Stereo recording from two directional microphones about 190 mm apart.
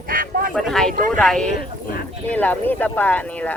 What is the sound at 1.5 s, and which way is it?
Speech, 50° left (ahead or behind).